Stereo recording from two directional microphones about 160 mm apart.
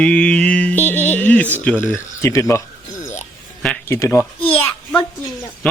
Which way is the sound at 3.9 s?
15° left (ahead or behind).